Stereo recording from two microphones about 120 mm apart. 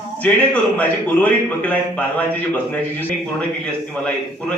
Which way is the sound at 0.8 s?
15° left (ahead or behind).